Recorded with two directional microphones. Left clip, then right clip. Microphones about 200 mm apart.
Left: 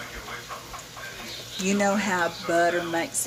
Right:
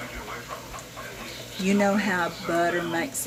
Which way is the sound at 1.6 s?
Centre (ahead or behind).